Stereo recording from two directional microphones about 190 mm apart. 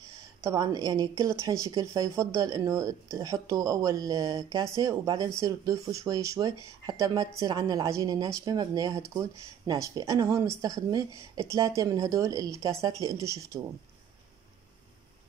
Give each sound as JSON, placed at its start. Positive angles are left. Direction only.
{"t": 0.4, "sound": "speech", "side_deg": -15}